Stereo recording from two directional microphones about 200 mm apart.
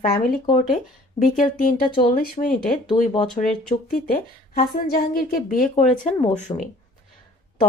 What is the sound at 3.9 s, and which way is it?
Speech, 45° left (ahead or behind).